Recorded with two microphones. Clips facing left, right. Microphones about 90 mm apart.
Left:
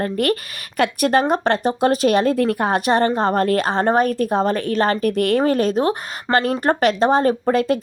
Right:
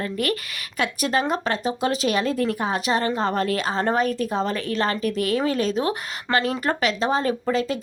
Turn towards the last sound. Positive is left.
turn(degrees=55)  # may be behind; listen again after turning